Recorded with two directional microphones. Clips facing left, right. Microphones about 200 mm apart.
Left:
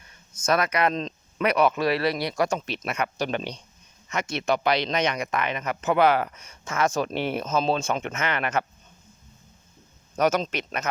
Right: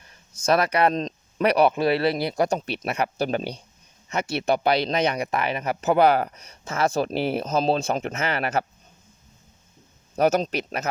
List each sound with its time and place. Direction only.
0.4 s speech: 35° right (ahead or behind)
10.2 s speech: 40° right (ahead or behind)